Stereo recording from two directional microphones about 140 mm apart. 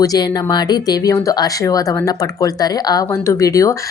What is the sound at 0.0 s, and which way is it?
Speech, 25° left (ahead or behind).